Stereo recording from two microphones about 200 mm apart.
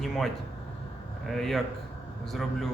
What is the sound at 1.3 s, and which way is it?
Speech, centre (ahead or behind).